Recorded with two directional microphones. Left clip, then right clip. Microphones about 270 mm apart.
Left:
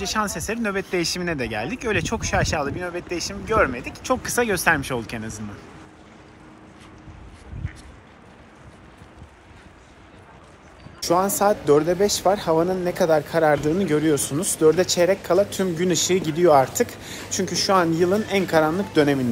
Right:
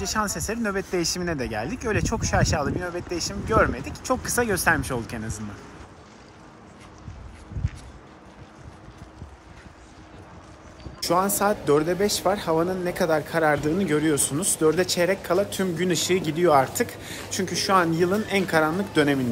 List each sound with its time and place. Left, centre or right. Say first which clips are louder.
0.2 s speech: left 1 dB; centre
11.0 s speech: left 2 dB; centre